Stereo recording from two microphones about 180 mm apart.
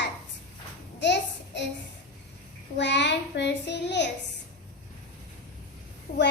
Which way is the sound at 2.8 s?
75° left (ahead or behind).